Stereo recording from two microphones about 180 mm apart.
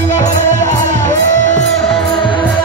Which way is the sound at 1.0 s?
45° left (ahead or behind).